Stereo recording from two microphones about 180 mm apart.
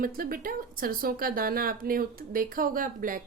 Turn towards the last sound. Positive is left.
turn(degrees=-50)  # may be behind; listen again after turning